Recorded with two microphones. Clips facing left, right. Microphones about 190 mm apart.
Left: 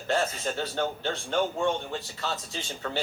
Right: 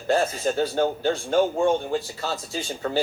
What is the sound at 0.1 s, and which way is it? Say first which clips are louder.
A man's voice: right 6 dB; 40° right (ahead or behind).